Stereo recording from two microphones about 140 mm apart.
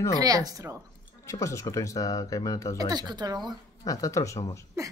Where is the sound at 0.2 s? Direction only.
25° right (ahead or behind).